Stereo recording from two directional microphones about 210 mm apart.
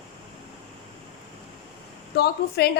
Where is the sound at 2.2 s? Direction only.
50° left (ahead or behind).